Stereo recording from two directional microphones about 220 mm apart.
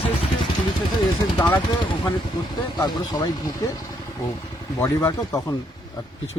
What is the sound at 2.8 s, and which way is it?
Speech, 15° left (ahead or behind).